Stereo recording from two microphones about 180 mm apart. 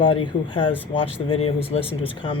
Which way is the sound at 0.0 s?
30° left (ahead or behind).